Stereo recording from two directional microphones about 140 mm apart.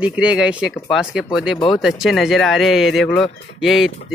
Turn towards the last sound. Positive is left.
turn(degrees=0)  # may be behind; listen again after turning